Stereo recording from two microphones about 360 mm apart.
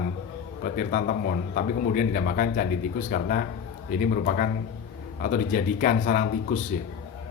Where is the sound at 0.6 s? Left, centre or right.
Left.